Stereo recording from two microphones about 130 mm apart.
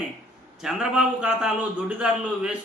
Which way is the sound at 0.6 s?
5° right (ahead or behind).